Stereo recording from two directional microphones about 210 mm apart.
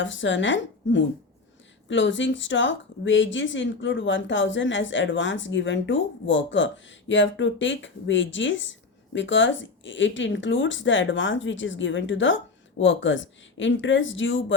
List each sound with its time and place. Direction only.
0.0 s speech: 60° left (ahead or behind)